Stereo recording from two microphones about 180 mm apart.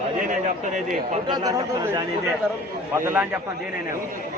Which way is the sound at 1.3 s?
20° right (ahead or behind).